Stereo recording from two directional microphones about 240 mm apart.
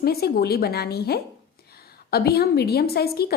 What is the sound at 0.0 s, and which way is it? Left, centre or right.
A woman's voice, left.